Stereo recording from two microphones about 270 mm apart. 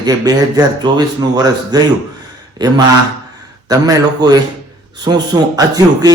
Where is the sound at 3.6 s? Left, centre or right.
Centre.